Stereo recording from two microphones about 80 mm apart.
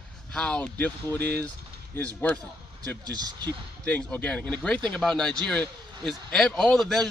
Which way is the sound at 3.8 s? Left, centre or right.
Centre.